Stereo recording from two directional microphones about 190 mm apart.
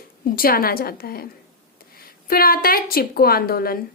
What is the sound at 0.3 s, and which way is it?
Speech, 50° left (ahead or behind).